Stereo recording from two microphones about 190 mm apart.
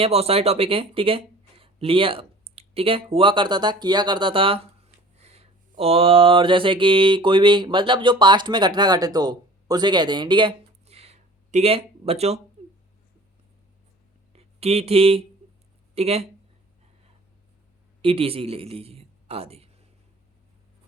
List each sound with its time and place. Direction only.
0.0 s speech: 30° right (ahead or behind)
5.2 s mantra: 35° right (ahead or behind)
14.3 s speech: 30° right (ahead or behind)
18.0 s a man's voice: 30° right (ahead or behind)